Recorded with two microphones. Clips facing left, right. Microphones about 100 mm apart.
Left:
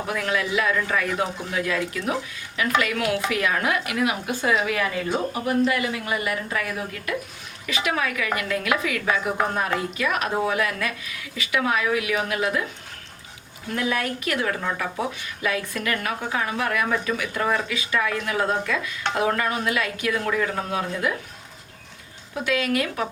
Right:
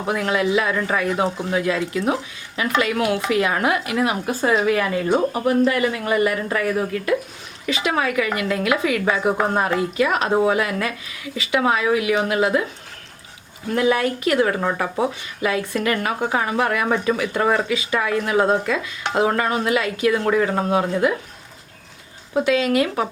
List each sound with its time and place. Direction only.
0.1 s a woman's voice: 30° right (ahead or behind); by 6.7 s 45° right (ahead or behind)
7.7 s a woman's voice: 25° right (ahead or behind)
13.7 s a woman's voice: 25° right (ahead or behind)
20.2 s speech: 40° right (ahead or behind)
22.4 s a woman's voice: 25° right (ahead or behind)